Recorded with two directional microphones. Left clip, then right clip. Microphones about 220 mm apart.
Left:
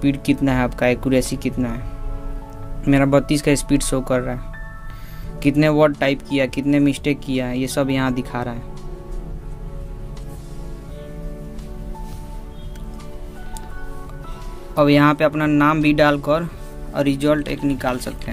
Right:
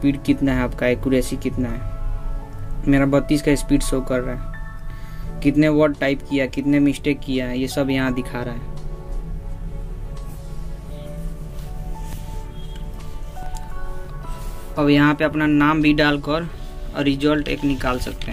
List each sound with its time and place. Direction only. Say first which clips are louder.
0.0 s speech: even; 25° left (ahead or behind)
2.8 s speech: left 2 dB; 25° left (ahead or behind)
5.4 s speech: left 1 dB; 25° left (ahead or behind)
14.8 s speech: left 2 dB; 25° left (ahead or behind)